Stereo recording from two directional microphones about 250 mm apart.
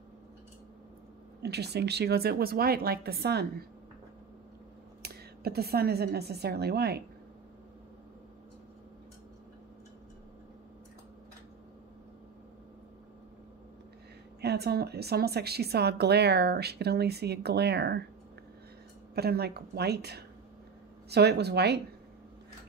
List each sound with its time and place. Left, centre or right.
1.4 s a woman's voice: right
5.0 s a woman's voice: right
14.4 s a woman's voice: right
19.1 s a woman's voice: right